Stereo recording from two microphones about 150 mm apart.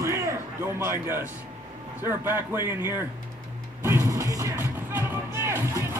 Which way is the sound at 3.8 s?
20° right (ahead or behind).